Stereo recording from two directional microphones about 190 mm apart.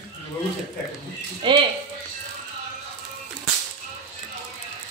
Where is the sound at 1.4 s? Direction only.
25° right (ahead or behind).